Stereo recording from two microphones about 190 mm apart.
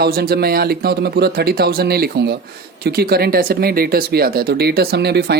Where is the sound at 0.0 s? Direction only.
55° right (ahead or behind).